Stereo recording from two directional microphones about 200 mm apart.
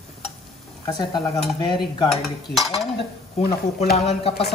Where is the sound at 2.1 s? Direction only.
Centre (ahead or behind).